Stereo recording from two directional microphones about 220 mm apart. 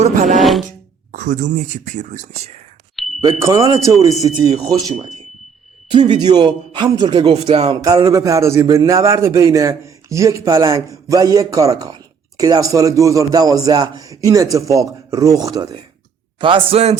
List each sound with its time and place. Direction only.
0.0 s music: 35° right (ahead or behind)
1.1 s speech: 35° right (ahead or behind)
2.9 s a sound: centre (ahead or behind)
3.2 s a man's voice: 15° right (ahead or behind)
6.1 s a man's voice: 20° right (ahead or behind)